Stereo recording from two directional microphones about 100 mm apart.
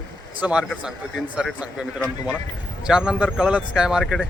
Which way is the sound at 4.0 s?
5° left (ahead or behind).